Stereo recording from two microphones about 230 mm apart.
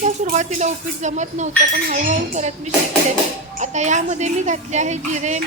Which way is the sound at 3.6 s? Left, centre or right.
Right.